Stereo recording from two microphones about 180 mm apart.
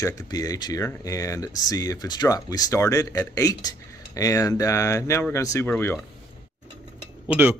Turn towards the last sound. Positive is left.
turn(degrees=-10)  # may be behind; listen again after turning